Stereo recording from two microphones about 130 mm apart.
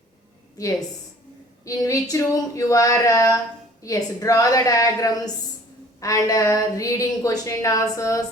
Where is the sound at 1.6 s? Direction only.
25° left (ahead or behind).